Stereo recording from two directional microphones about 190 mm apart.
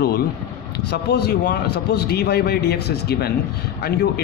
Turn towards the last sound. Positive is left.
turn(degrees=60)  # may be behind; listen again after turning